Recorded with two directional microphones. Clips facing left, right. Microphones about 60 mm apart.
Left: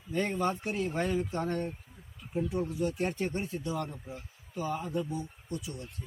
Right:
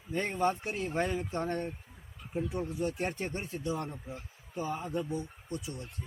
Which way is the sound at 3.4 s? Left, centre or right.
Right.